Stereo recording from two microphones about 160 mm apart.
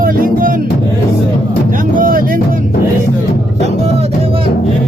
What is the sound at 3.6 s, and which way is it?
Music, 40° right (ahead or behind).